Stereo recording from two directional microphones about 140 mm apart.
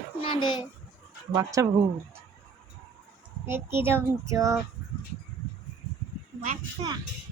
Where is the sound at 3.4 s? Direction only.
15° right (ahead or behind).